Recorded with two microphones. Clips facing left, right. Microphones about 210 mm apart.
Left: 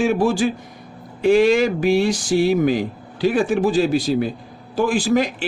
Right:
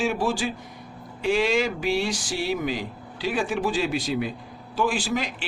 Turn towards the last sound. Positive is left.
turn(degrees=45)  # may be behind; listen again after turning